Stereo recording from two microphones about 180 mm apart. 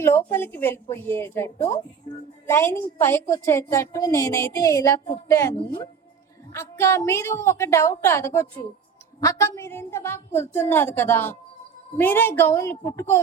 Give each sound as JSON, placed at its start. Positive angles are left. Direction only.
{"t": 0.0, "sound": "a woman's voice", "side_deg": 15}